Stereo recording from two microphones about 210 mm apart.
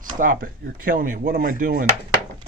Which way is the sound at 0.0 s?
40° right (ahead or behind).